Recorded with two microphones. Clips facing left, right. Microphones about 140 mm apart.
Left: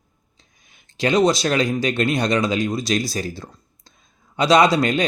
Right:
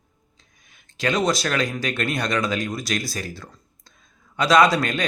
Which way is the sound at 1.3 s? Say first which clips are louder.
Left 4 dB; 25° left (ahead or behind).